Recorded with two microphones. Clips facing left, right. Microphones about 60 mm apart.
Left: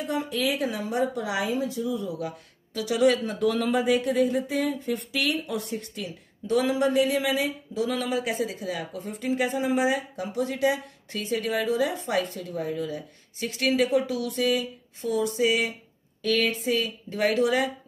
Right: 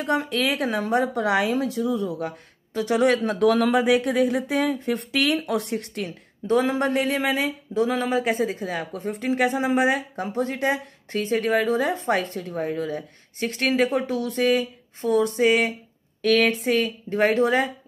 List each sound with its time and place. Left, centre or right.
0.0 s speech: right
6.4 s speech: right
6.9 s speech: right
17.1 s speech: right